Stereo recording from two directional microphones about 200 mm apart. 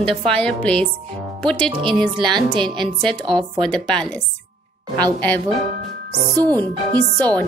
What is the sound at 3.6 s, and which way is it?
Speech, 5° left (ahead or behind).